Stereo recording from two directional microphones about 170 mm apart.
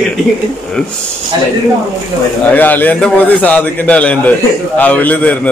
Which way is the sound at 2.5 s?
10° left (ahead or behind).